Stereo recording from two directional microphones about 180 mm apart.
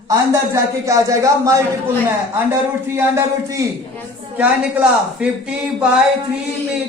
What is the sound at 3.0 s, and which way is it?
A man's voice, 15° right (ahead or behind).